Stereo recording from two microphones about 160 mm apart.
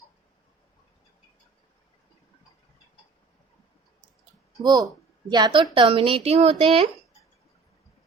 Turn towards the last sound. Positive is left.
turn(degrees=-40)  # may be behind; listen again after turning